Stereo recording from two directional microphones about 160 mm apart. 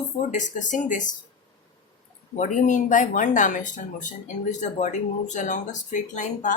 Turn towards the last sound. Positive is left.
turn(degrees=50)  # may be behind; listen again after turning